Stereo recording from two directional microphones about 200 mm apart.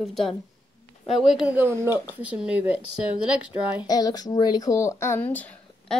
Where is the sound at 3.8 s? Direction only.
20° left (ahead or behind).